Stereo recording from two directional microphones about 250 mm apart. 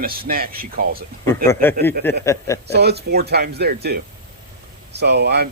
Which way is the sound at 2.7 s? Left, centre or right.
Right.